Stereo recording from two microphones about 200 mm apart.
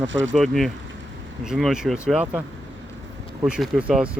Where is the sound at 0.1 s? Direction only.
65° right (ahead or behind).